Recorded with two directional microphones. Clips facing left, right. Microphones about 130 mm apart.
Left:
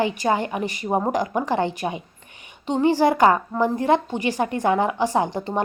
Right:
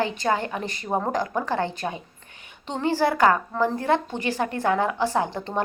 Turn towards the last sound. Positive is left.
turn(degrees=15)  # may be behind; listen again after turning